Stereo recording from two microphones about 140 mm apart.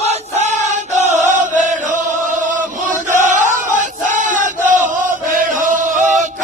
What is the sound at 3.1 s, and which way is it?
Chant, 65° right (ahead or behind).